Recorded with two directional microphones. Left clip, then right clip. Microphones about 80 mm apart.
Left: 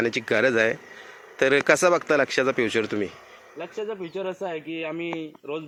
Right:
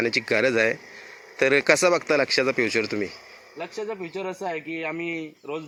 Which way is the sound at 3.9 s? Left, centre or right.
Right.